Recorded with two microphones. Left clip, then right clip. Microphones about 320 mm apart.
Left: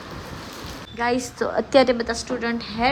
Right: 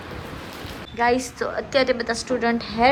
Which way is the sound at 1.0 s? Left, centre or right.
Centre.